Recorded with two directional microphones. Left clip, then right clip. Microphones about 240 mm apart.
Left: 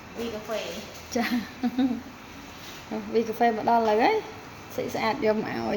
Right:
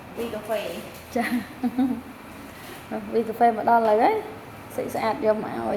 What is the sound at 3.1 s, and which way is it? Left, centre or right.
A woman's voice, left.